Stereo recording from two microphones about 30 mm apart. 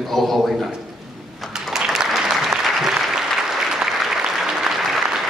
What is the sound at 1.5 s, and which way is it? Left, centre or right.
Applause, centre.